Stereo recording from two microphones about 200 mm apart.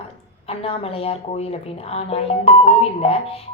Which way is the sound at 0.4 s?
30° left (ahead or behind).